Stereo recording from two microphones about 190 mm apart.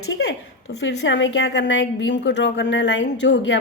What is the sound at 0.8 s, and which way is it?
A woman's voice, 75° left (ahead or behind).